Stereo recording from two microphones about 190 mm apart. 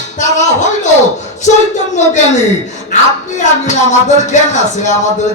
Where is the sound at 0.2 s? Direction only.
40° left (ahead or behind).